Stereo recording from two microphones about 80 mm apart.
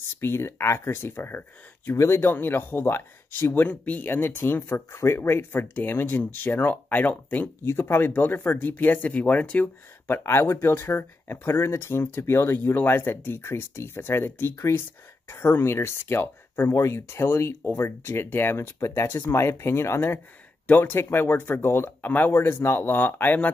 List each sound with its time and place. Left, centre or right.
0.2 s speech: left
3.6 s speech: centre
7.6 s speech: left